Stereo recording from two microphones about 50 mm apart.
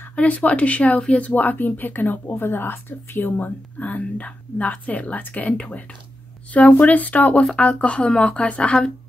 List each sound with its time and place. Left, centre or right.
0.1 s a woman's voice: left